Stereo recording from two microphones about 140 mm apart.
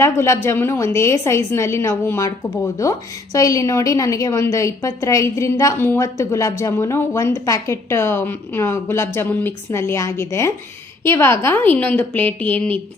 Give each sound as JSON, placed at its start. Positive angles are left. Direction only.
{"t": 0.0, "sound": "a woman's voice", "side_deg": 20}
{"t": 3.3, "sound": "a woman's voice", "side_deg": 25}